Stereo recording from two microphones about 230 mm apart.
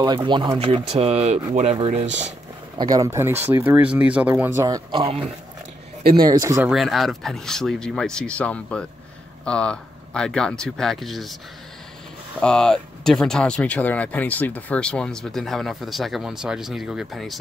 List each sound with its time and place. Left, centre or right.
0.0 s speech: centre
2.8 s speech: centre
6.7 s speech: centre
12.4 s speech: centre